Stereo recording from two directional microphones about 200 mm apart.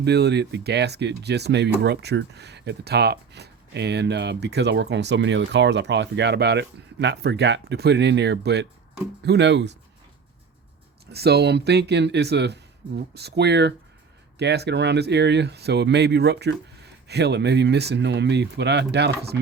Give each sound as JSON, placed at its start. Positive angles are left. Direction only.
{"t": 0.0, "sound": "speech", "side_deg": -55}
{"t": 11.1, "sound": "speech", "side_deg": -55}